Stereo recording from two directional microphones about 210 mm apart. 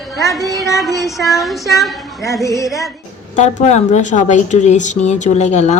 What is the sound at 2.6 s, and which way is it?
Child singing, centre (ahead or behind).